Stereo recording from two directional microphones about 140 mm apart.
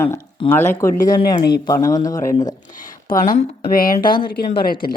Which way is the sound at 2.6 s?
65° left (ahead or behind).